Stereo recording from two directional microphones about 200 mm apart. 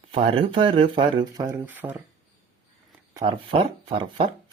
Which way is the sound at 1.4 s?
10° right (ahead or behind).